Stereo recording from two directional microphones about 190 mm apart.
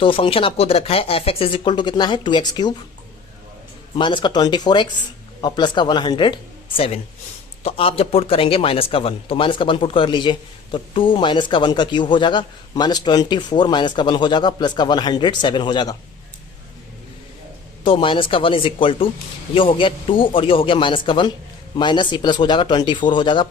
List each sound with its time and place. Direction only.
0.0 s a man's voice: 30° left (ahead or behind)
3.9 s a man's voice: 25° left (ahead or behind)
17.8 s a man's voice: 25° left (ahead or behind)